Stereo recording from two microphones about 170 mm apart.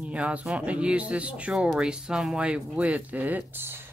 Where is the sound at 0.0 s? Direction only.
5° right (ahead or behind).